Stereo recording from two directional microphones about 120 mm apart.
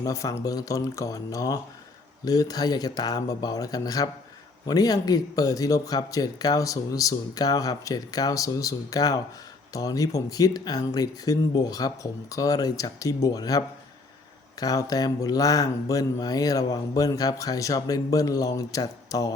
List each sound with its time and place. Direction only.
0.0 s speech: 25° left (ahead or behind)